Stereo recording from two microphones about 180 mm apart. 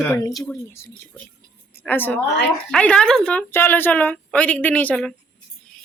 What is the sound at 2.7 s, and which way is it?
A woman's voice, 5° left (ahead or behind).